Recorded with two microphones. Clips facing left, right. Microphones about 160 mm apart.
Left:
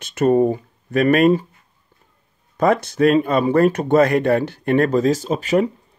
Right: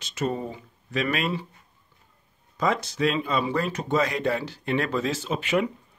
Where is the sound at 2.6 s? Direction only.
55° left (ahead or behind); by 5.6 s 40° left (ahead or behind).